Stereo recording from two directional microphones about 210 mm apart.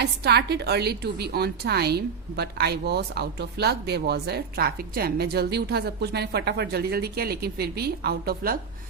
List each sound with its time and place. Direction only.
0.0 s a woman's voice: 50° right (ahead or behind)